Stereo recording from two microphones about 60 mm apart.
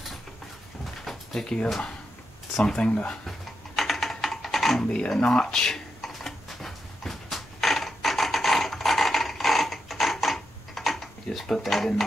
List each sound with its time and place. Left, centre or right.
1.0 s a sound: centre
2.5 s speech: centre
3.3 s typing: centre
4.8 s speech: centre
5.9 s a sound: centre
11.3 s speech: centre